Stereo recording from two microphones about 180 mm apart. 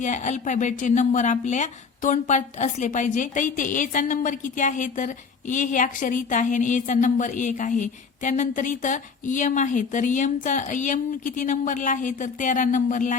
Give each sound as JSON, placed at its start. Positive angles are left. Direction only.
{"t": 0.0, "sound": "speech", "side_deg": 40}